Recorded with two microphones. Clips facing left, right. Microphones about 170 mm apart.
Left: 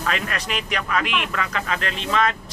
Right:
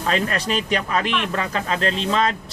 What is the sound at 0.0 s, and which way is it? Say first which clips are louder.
A man's voice: right 4 dB; 30° right (ahead or behind).